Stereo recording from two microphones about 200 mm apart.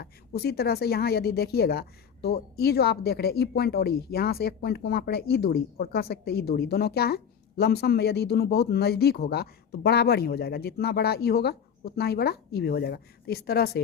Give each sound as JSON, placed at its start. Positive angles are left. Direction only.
{"t": 0.0, "sound": "speech", "side_deg": 50}